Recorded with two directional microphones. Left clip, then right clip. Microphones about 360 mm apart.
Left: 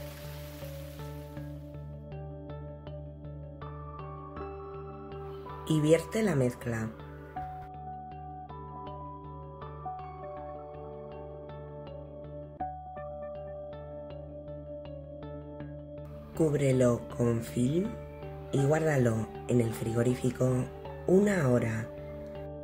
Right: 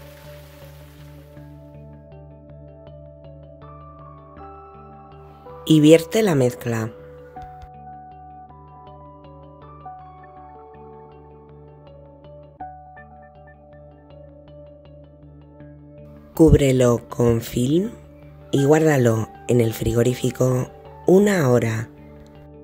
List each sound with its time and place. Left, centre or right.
5.7 s speech: right
16.3 s speech: right